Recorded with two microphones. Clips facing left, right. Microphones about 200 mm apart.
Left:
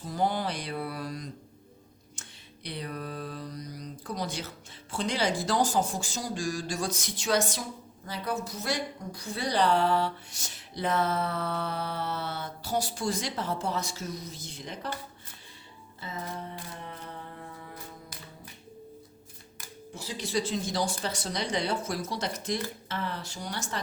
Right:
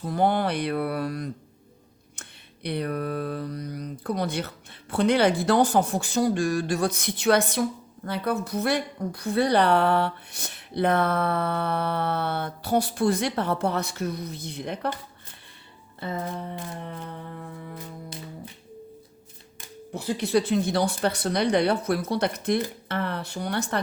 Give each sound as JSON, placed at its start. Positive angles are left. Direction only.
{"t": 0.0, "sound": "a woman's voice", "side_deg": -60}
{"t": 2.2, "sound": "a sound", "side_deg": -60}
{"t": 2.6, "sound": "a woman's voice", "side_deg": -60}
{"t": 19.9, "sound": "a woman's voice", "side_deg": -60}